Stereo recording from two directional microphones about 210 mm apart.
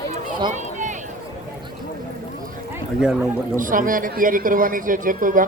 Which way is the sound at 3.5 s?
40° right (ahead or behind).